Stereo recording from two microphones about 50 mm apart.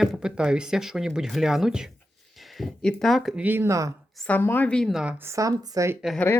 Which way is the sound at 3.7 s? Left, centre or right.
Right.